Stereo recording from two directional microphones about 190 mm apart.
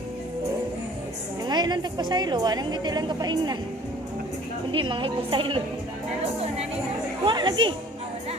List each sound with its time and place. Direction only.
1.5 s a woman's voice: 20° right (ahead or behind)
4.7 s a woman's voice: 25° right (ahead or behind)
7.3 s a woman's voice: 25° right (ahead or behind)